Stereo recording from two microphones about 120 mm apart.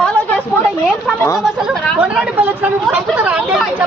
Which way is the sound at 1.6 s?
10° right (ahead or behind).